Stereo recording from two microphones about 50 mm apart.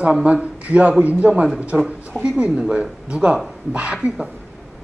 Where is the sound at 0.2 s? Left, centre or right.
Right.